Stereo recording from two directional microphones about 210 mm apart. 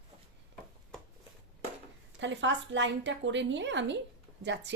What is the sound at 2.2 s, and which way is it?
A woman's voice, 60° right (ahead or behind).